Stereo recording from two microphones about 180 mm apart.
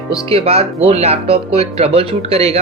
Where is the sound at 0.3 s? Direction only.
30° right (ahead or behind).